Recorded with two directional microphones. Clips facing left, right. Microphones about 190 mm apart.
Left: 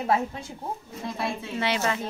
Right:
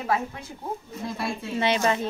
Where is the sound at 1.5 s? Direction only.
25° right (ahead or behind).